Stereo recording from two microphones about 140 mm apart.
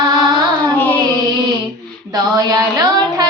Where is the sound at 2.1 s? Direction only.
30° right (ahead or behind).